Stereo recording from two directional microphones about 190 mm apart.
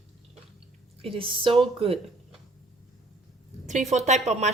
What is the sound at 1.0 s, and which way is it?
Speech, 30° right (ahead or behind).